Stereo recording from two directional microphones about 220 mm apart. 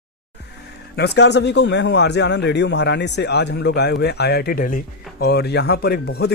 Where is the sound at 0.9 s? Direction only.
50° left (ahead or behind).